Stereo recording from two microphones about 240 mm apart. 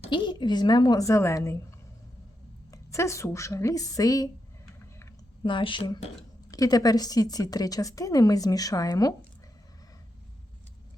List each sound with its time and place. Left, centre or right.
0.0 s a woman's voice: centre
2.7 s a woman's voice: centre
4.9 s a sound: centre
6.5 s a woman's voice: centre